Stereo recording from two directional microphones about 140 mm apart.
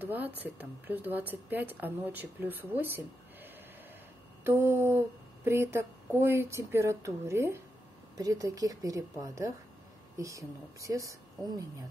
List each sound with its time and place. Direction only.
0.0 s speech: 15° right (ahead or behind)
4.5 s speech: 20° right (ahead or behind)